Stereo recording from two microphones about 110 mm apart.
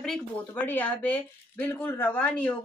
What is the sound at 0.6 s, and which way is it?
Speech, 15° left (ahead or behind).